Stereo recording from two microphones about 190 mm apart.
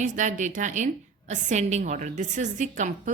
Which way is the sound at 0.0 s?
40° right (ahead or behind).